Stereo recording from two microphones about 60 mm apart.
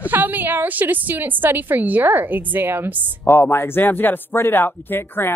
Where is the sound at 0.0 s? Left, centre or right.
Right.